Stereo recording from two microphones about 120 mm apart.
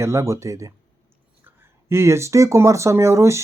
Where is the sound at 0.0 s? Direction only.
25° right (ahead or behind).